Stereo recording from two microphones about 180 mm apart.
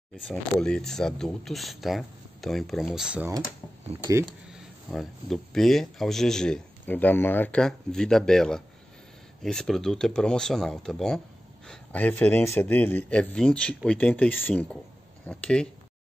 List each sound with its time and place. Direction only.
0.3 s speech: 5° left (ahead or behind)
4.0 s speech: 20° right (ahead or behind)
4.5 s a man's voice: centre (ahead or behind)